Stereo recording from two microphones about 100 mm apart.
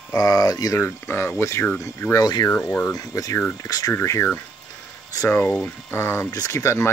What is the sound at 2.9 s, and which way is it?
Speech, 35° left (ahead or behind).